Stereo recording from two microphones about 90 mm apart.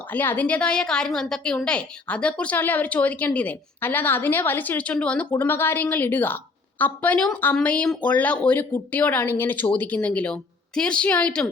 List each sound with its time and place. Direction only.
0.1 s a woman's voice: 20° left (ahead or behind)
5.4 s a woman's voice: 25° left (ahead or behind)